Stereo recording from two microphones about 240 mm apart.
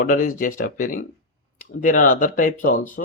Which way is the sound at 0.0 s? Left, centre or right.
Left.